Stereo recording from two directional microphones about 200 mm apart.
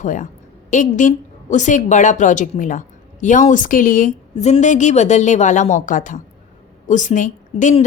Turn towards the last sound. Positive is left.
turn(degrees=40)  # may be behind; listen again after turning